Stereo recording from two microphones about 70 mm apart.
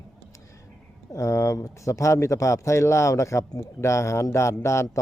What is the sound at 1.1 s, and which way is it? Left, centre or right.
A man's voice, left.